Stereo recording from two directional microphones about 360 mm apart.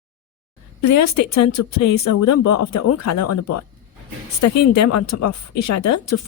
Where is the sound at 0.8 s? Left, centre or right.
Left.